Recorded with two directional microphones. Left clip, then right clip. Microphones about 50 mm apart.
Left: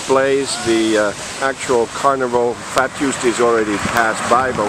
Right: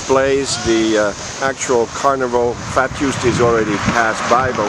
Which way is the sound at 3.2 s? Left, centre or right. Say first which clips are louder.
Even; centre.